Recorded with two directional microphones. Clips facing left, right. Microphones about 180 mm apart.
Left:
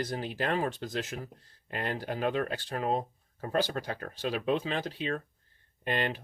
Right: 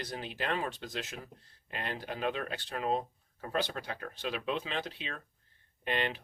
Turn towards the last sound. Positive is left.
turn(degrees=45)  # may be behind; listen again after turning